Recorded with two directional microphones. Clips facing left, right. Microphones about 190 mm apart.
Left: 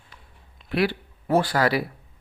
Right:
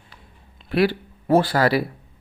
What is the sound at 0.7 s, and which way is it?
Speech, 40° right (ahead or behind).